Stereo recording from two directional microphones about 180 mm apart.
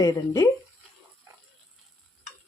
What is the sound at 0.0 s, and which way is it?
Speech, 20° left (ahead or behind).